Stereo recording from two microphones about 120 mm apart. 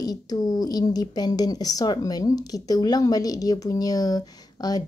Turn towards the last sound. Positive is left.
turn(degrees=35)  # may be behind; listen again after turning